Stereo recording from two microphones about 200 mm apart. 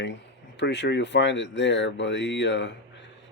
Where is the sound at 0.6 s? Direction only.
60° left (ahead or behind).